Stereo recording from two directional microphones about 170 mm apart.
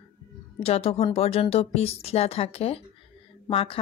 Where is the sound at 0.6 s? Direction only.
35° left (ahead or behind).